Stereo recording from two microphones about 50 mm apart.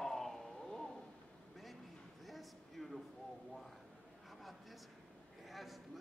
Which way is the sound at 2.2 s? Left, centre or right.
Centre.